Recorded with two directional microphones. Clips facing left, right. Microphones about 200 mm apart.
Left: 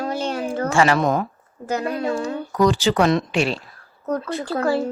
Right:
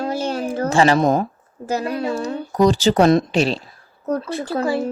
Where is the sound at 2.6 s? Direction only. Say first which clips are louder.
Right 3 dB; 40° right (ahead or behind).